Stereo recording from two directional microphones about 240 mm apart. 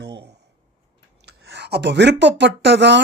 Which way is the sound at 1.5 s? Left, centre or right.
Right.